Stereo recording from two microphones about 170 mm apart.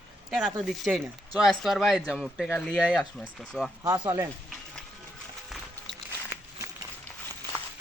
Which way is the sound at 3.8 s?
20° right (ahead or behind).